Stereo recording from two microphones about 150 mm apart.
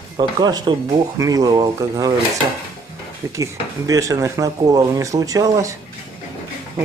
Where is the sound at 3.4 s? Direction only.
20° right (ahead or behind).